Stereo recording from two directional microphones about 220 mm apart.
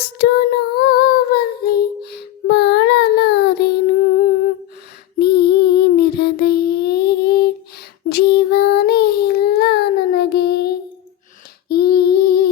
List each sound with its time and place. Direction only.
0.0 s a sound: 45° left (ahead or behind)
5.2 s child singing: 45° left (ahead or behind)
11.7 s female singing: 45° left (ahead or behind)